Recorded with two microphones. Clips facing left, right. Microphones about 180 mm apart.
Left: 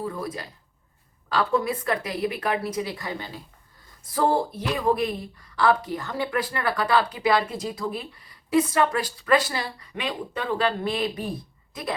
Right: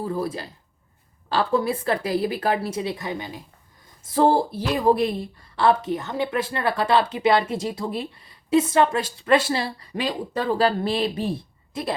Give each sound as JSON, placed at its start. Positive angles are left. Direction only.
{"t": 0.0, "sound": "speech", "side_deg": -30}
{"t": 4.1, "sound": "speech", "side_deg": -30}